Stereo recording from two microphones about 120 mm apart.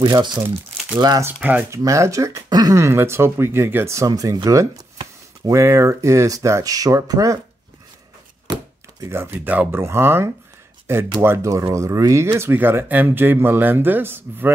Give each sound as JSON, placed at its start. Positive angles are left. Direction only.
{"t": 0.0, "sound": "speech", "side_deg": -40}
{"t": 1.2, "sound": "a man's voice", "side_deg": -15}
{"t": 1.7, "sound": "speech", "side_deg": -25}
{"t": 9.0, "sound": "a man's voice", "side_deg": -20}